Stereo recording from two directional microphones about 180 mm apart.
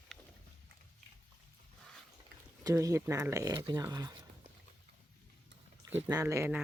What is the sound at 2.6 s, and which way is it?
Speech, 15° right (ahead or behind).